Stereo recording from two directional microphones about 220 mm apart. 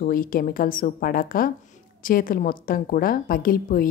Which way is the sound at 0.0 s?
40° left (ahead or behind).